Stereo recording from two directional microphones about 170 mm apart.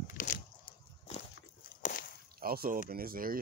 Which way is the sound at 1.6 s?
55° left (ahead or behind).